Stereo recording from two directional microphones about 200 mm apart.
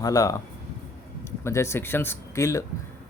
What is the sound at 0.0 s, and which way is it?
Speech, 15° left (ahead or behind).